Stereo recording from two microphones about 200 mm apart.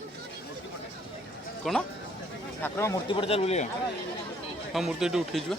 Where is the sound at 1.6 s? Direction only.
Centre (ahead or behind).